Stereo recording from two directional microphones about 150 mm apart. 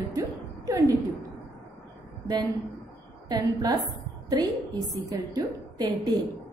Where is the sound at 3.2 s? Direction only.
25° right (ahead or behind).